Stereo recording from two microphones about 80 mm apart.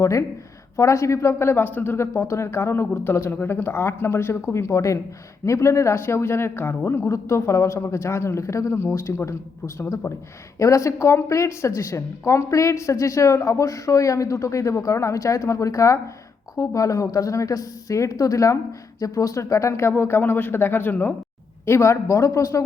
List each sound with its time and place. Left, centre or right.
0.0 s a woman's voice: left
4.7 s a woman's voice: left
7.1 s a woman's voice: left
21.7 s a woman's voice: left